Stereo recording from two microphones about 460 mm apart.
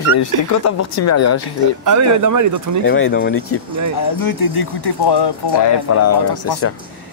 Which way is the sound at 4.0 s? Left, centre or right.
Left.